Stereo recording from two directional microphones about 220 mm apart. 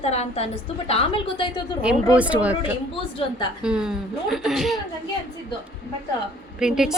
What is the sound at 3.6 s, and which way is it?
Speech, 5° right (ahead or behind).